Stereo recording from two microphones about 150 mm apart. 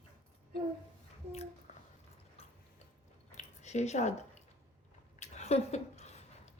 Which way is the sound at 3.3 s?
50° left (ahead or behind).